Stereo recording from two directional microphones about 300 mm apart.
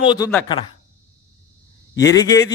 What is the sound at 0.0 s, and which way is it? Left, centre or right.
Speech, centre.